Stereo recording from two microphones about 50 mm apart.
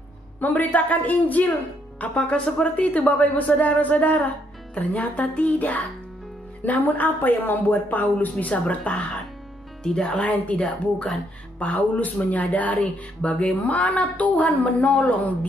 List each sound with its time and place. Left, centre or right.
0.4 s speech: left
9.8 s speech: centre
10.2 s speech: left